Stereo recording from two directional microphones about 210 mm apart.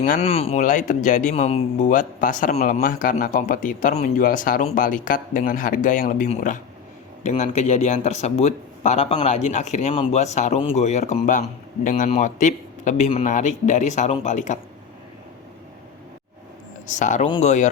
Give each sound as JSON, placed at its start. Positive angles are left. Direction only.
{"t": 0.0, "sound": "speech", "side_deg": 35}
{"t": 16.8, "sound": "speech", "side_deg": 35}
{"t": 17.2, "sound": "speech", "side_deg": 20}